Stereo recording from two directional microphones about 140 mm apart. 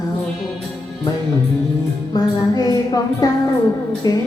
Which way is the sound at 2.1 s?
25° left (ahead or behind).